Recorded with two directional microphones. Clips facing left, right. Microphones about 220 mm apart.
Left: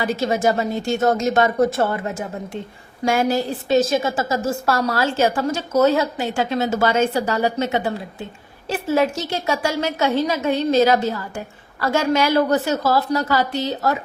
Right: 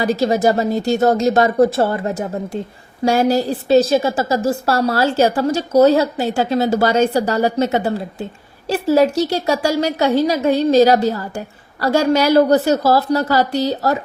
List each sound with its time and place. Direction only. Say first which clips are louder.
0.0 s a woman's voice: right 4 dB; 35° right (ahead or behind)